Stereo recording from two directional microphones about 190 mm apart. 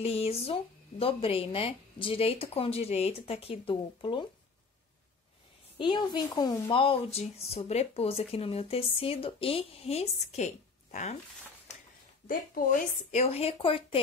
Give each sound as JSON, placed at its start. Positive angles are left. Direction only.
{"t": 0.0, "sound": "speech", "side_deg": 30}
{"t": 5.8, "sound": "speech", "side_deg": 25}
{"t": 12.3, "sound": "speech", "side_deg": 45}